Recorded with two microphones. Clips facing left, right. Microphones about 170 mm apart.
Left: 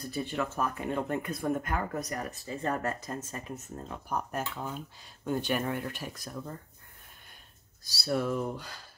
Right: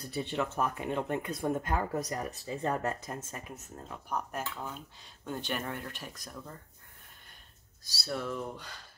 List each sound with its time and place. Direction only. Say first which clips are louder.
0.1 s speech: even; 20° right (ahead or behind)
3.9 s speech: left 2 dB; centre (ahead or behind)
7.8 s speech: left 6 dB; 10° left (ahead or behind)